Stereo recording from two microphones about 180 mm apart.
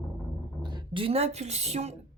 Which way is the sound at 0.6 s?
25° right (ahead or behind).